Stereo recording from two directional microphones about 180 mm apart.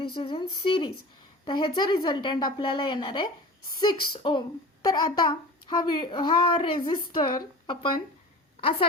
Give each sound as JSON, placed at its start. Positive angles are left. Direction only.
{"t": 0.0, "sound": "speech", "side_deg": 30}